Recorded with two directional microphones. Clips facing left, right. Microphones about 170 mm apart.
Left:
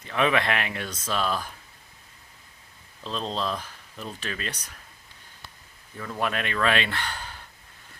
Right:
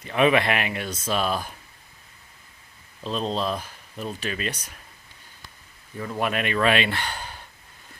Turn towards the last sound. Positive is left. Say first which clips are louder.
# right 3 dB
turn(degrees=-15)  # may be behind; listen again after turning